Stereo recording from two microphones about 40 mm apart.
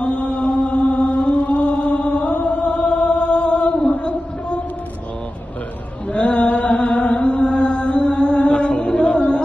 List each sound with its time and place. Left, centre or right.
0.0 s chant: left
1.4 s chant: left
1.7 s chant: left
3.9 s a sound: left
6.1 s chant: left